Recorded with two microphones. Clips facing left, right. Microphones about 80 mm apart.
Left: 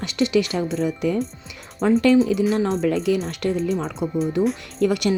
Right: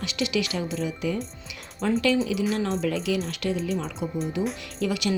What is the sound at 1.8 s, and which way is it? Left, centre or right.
Speech, left.